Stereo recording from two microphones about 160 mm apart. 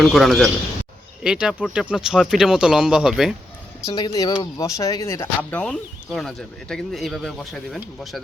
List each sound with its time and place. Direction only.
0.0 s speech: centre (ahead or behind)
3.8 s speech: 25° left (ahead or behind); by 7.8 s centre (ahead or behind)